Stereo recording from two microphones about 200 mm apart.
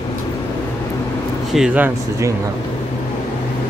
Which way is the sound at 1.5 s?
5° right (ahead or behind).